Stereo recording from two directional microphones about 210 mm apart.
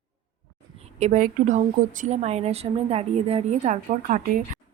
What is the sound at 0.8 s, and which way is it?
A woman's voice, 30° right (ahead or behind).